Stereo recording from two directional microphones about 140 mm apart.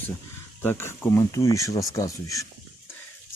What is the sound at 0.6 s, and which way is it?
Speech, 15° left (ahead or behind).